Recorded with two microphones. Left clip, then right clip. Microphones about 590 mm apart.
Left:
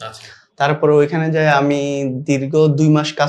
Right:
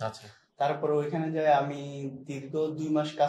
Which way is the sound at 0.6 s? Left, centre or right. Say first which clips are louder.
Left 14 dB; left.